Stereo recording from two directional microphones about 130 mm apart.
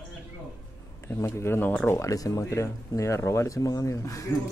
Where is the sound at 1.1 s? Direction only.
20° left (ahead or behind).